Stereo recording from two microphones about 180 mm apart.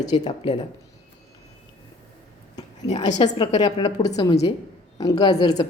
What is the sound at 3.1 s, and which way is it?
A woman's voice, 25° left (ahead or behind).